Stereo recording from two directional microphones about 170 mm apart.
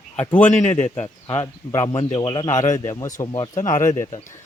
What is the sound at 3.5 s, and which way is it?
Speech, 50° left (ahead or behind).